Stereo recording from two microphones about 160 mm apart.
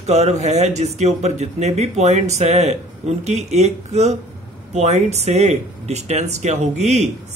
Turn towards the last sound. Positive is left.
turn(degrees=-45)  # may be behind; listen again after turning